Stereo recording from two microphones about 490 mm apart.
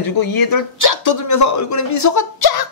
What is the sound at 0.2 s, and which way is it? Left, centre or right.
Speech, left.